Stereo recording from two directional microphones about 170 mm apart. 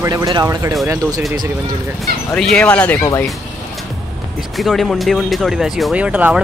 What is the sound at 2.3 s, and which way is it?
Speech, 5° left (ahead or behind).